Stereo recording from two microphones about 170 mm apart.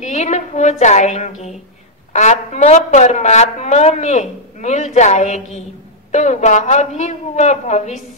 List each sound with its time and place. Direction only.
0.0 s a woman's voice: 40° left (ahead or behind)